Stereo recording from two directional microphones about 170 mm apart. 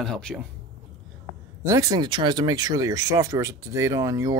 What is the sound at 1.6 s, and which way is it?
Speech, 20° right (ahead or behind).